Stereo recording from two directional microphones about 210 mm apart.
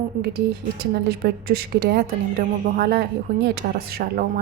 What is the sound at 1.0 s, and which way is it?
Speech, 50° right (ahead or behind).